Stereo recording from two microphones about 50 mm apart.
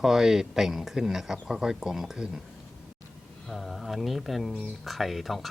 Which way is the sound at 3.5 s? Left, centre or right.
Centre.